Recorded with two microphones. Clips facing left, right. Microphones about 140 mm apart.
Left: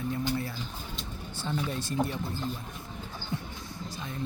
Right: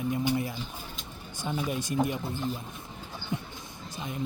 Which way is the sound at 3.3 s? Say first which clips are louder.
Right 2 dB; 20° right (ahead or behind).